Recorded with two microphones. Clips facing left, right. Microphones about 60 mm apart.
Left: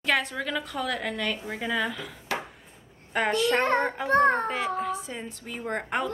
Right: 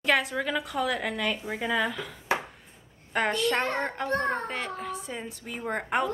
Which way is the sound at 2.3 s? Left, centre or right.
Right.